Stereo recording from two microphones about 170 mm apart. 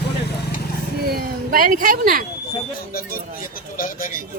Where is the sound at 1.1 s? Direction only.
60° right (ahead or behind).